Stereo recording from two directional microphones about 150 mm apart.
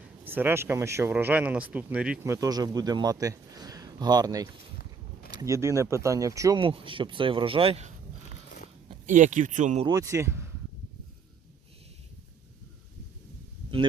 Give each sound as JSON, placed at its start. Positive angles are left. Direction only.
{"t": 0.3, "sound": "speech", "side_deg": -15}
{"t": 2.2, "sound": "a man's voice", "side_deg": -20}
{"t": 6.6, "sound": "speech", "side_deg": -35}
{"t": 9.0, "sound": "speech", "side_deg": -55}
{"t": 9.8, "sound": "speech", "side_deg": -25}